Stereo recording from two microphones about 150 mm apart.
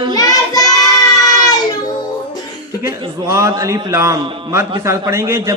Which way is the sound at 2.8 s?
20° right (ahead or behind).